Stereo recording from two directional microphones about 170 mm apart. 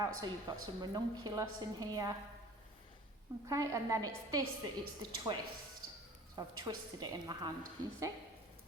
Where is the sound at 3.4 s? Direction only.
20° right (ahead or behind).